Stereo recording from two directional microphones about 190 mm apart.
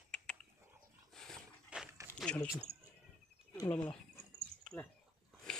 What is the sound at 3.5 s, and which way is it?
Wild animals, 20° left (ahead or behind).